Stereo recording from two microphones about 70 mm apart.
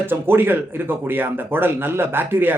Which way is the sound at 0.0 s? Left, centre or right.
Right.